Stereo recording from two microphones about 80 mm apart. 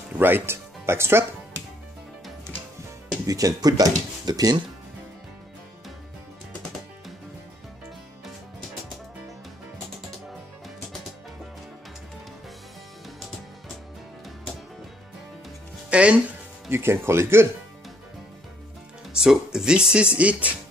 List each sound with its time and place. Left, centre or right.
0.2 s speech: right
3.3 s speech: right
15.9 s music: centre
16.7 s speech: right
19.1 s speech: centre